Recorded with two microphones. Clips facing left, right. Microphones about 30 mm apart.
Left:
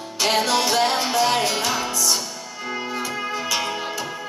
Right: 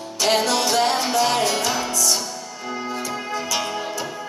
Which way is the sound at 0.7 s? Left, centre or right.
Centre.